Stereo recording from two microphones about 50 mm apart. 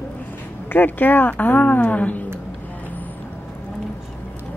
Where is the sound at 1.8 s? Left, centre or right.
Left.